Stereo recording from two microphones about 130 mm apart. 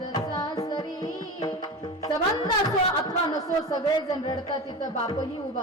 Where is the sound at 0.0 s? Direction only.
30° left (ahead or behind).